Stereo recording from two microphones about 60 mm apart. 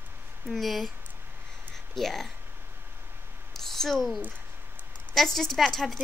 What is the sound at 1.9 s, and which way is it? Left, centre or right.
Speech, centre.